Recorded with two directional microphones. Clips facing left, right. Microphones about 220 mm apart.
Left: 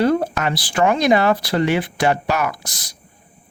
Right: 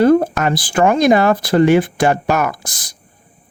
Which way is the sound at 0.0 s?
50° right (ahead or behind).